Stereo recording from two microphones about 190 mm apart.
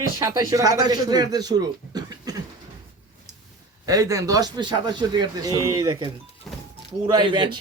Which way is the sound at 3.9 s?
15° right (ahead or behind).